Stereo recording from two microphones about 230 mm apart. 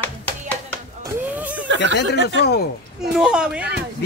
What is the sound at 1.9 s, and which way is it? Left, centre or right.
Speech, right.